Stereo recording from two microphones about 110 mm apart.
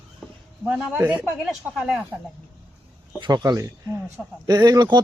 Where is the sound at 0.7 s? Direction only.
15° right (ahead or behind).